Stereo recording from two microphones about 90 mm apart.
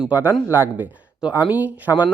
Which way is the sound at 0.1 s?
20° right (ahead or behind).